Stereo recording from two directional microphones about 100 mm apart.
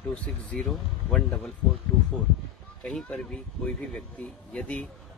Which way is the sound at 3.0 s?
10° left (ahead or behind).